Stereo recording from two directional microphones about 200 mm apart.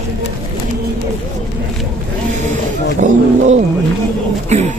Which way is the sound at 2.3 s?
35° right (ahead or behind).